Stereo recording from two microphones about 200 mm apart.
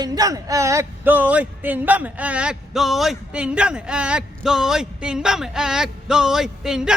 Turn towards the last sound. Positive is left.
turn(degrees=-5)  # may be behind; listen again after turning